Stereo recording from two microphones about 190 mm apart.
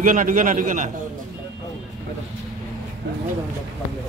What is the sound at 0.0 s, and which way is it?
Speech, 45° right (ahead or behind).